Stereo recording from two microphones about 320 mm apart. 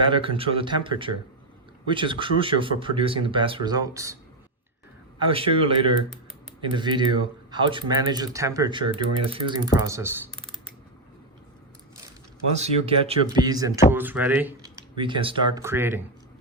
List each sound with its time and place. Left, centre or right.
0.1 s speech: centre
5.3 s speech: centre
12.5 s speech: centre